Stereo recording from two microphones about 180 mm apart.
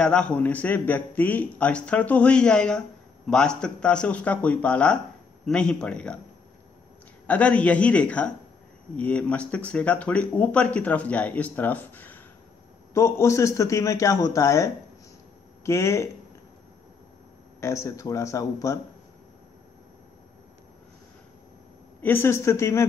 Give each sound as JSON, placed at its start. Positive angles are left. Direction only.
{"t": 0.0, "sound": "speech", "side_deg": 5}
{"t": 7.2, "sound": "speech", "side_deg": 5}
{"t": 17.6, "sound": "speech", "side_deg": 15}
{"t": 22.0, "sound": "speech", "side_deg": 15}